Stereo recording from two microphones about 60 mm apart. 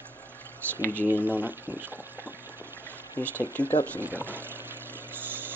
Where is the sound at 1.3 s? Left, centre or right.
Right.